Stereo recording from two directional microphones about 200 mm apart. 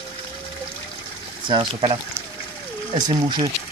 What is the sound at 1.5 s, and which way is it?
Speech, 25° right (ahead or behind).